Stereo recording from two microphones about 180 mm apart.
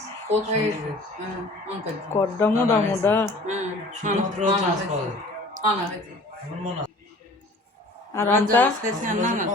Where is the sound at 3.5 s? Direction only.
40° right (ahead or behind).